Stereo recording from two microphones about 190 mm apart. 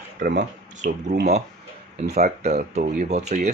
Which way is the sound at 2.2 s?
40° right (ahead or behind).